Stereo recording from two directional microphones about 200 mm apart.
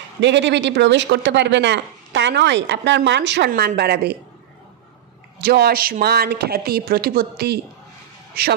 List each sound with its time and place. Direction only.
0.2 s speech: 60° right (ahead or behind)
5.4 s speech: 50° right (ahead or behind)